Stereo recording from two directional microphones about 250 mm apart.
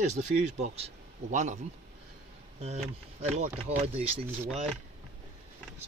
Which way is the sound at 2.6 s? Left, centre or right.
Right.